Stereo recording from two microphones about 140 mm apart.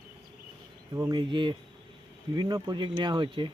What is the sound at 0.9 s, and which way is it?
Speech, 25° right (ahead or behind).